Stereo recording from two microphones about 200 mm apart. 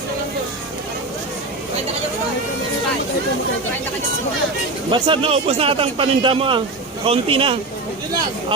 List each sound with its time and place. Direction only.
4.9 s a man's voice: 25° right (ahead or behind)